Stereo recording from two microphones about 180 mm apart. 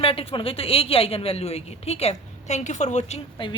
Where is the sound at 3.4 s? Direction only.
30° left (ahead or behind).